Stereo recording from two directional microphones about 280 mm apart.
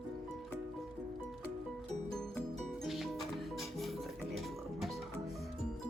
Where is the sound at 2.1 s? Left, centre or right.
Centre.